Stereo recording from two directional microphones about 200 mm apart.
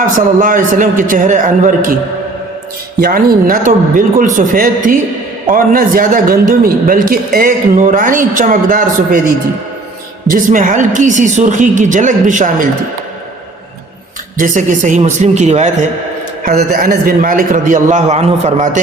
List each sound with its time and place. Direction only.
0.0 s a woman's voice: 40° right (ahead or behind)
3.0 s a man's voice: 45° right (ahead or behind)
10.2 s a woman's voice: 45° right (ahead or behind)
14.3 s a woman's voice: 40° right (ahead or behind)
16.4 s a woman's voice: 50° right (ahead or behind)